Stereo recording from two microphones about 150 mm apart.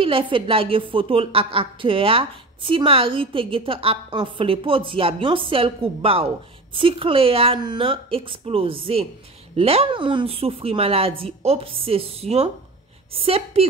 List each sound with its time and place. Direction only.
0.0 s a woman's voice: 35° right (ahead or behind)